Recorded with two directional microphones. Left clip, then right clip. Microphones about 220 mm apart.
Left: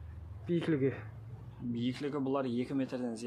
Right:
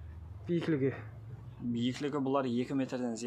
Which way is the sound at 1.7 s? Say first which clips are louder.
Right 2 dB; 20° right (ahead or behind).